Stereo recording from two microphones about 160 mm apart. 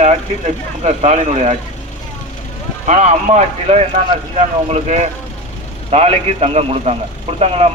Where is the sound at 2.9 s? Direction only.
50° right (ahead or behind).